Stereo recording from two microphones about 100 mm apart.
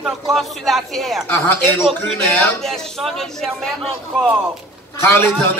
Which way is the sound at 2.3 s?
5° left (ahead or behind).